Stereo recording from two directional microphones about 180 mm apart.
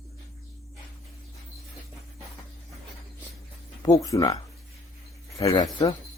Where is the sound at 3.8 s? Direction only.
20° left (ahead or behind).